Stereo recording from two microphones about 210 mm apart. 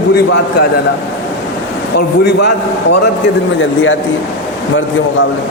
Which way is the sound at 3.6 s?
65° left (ahead or behind).